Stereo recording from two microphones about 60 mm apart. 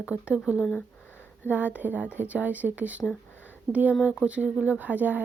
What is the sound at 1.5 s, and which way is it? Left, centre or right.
Speech, right.